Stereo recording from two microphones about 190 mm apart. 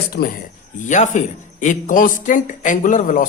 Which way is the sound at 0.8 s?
40° left (ahead or behind).